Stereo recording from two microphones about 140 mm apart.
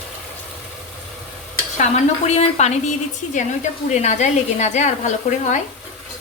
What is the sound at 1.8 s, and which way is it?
A woman's voice, 50° left (ahead or behind).